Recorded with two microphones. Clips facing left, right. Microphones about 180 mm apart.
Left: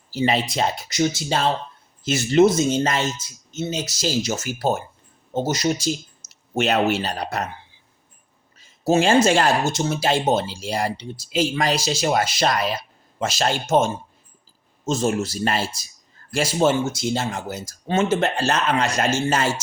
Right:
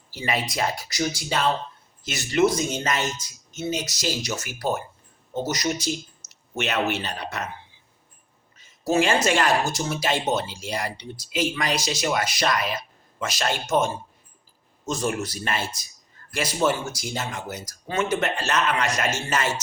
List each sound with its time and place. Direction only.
0.1 s speech: 25° left (ahead or behind)
8.5 s speech: 30° left (ahead or behind)